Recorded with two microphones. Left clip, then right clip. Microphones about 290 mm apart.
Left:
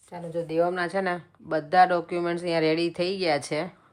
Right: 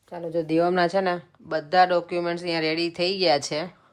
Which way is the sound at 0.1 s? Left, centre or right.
Centre.